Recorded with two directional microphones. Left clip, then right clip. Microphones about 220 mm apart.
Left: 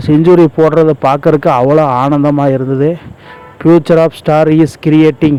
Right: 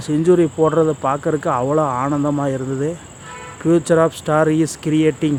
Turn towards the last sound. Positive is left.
turn(degrees=30)  # may be behind; listen again after turning